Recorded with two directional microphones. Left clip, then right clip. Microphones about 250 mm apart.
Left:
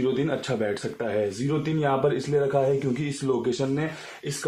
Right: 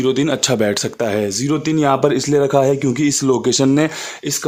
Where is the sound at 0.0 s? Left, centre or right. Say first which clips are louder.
Right 9 dB; right.